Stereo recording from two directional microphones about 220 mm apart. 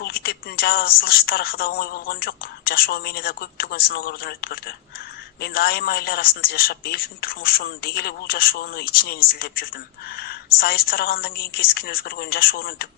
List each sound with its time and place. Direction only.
0.0 s a woman's voice: 45° left (ahead or behind)